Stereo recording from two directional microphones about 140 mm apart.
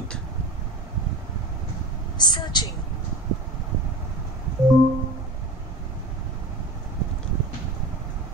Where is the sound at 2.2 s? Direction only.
30° left (ahead or behind).